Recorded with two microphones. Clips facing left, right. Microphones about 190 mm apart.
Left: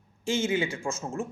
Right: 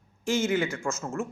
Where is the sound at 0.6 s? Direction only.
30° left (ahead or behind).